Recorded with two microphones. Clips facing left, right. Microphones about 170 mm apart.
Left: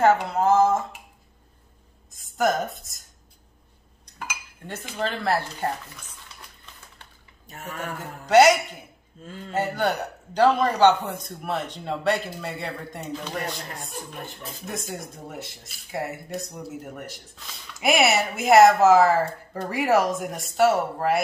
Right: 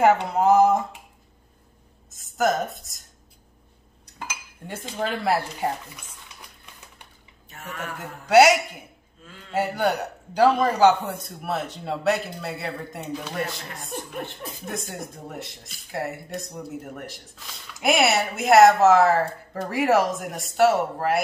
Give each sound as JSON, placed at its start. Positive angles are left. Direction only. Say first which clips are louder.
{"t": 0.0, "sound": "a sound", "louder": "right 1 dB", "side_deg": -15}
{"t": 2.1, "sound": "speech", "louder": "even", "side_deg": 0}
{"t": 4.6, "sound": "speech", "louder": "right 1 dB", "side_deg": -10}
{"t": 7.4, "sound": "speech", "louder": "left 1 dB", "side_deg": 35}
{"t": 8.3, "sound": "speech", "louder": "even", "side_deg": -5}
{"t": 9.2, "sound": "a man's voice", "louder": "left 8 dB", "side_deg": 40}
{"t": 9.5, "sound": "speech", "louder": "right 1 dB", "side_deg": -10}
{"t": 14.7, "sound": "speech", "louder": "even", "side_deg": 0}